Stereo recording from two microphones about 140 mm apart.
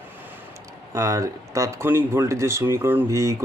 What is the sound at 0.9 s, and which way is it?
Speech, 25° right (ahead or behind).